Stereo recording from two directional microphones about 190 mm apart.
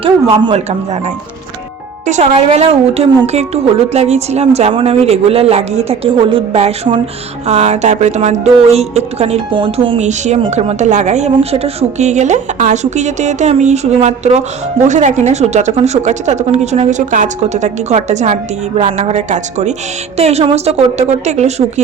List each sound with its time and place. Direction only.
0.0 s speech: 30° right (ahead or behind)
2.0 s speech: 35° right (ahead or behind)